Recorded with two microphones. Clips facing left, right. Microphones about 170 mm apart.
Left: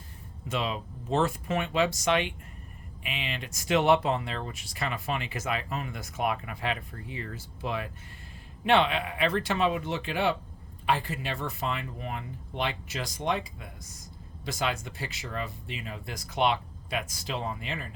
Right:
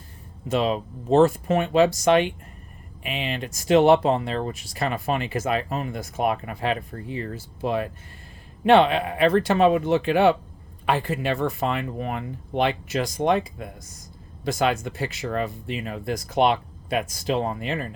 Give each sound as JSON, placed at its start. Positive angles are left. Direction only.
{"t": 0.4, "sound": "speech", "side_deg": -40}